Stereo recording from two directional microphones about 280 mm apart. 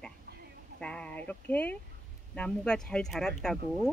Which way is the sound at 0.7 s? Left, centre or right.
Centre.